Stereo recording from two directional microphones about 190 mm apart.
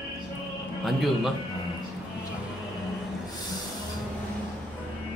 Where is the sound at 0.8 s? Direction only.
Centre (ahead or behind).